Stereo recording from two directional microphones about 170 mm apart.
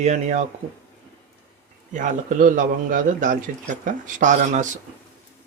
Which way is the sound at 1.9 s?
50° right (ahead or behind).